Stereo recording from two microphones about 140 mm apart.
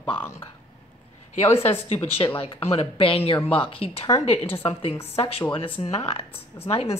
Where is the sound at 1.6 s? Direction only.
45° left (ahead or behind).